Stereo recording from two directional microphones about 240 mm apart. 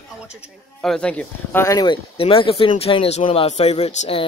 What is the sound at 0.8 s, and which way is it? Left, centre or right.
Speech, centre.